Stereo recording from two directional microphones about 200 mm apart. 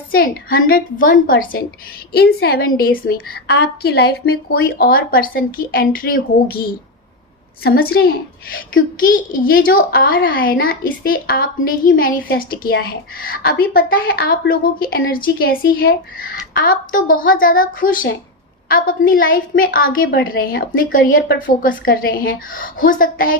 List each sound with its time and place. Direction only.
0.1 s a woman's voice: 45° left (ahead or behind)
7.6 s a woman's voice: 50° left (ahead or behind)